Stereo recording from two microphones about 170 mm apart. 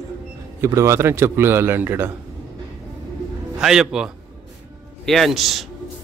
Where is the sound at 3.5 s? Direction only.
5° right (ahead or behind).